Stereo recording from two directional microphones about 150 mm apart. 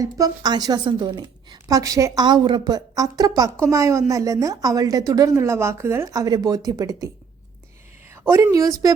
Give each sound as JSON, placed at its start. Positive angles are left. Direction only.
{"t": 0.0, "sound": "a woman's voice", "side_deg": -25}
{"t": 8.1, "sound": "a woman's voice", "side_deg": -20}